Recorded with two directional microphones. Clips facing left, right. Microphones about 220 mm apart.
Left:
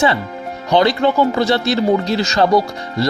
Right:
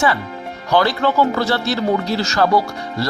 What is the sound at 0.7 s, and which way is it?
Speech, 20° left (ahead or behind).